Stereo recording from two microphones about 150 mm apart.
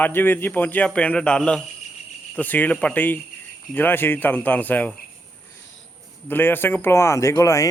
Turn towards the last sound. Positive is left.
turn(degrees=20)  # may be behind; listen again after turning